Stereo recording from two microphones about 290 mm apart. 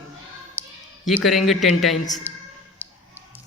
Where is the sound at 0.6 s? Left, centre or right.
Centre.